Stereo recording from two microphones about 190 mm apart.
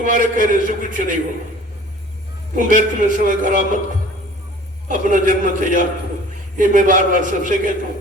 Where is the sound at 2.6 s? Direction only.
45° right (ahead or behind).